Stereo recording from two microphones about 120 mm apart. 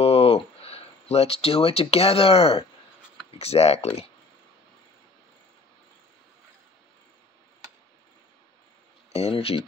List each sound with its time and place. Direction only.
0.0 s a sound: 55° left (ahead or behind)
3.3 s speech: 60° left (ahead or behind)
9.1 s speech: 55° left (ahead or behind)